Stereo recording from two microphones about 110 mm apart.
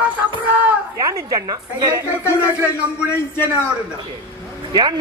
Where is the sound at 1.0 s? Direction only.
30° right (ahead or behind).